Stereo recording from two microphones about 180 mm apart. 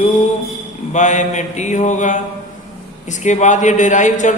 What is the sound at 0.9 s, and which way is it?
Mantra, 40° left (ahead or behind).